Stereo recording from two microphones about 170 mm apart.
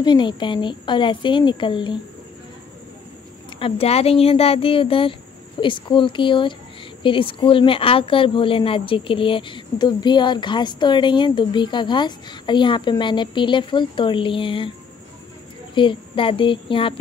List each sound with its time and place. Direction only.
0.0 s speech: 25° left (ahead or behind)
3.5 s speech: 35° left (ahead or behind)
15.7 s speech: 30° left (ahead or behind)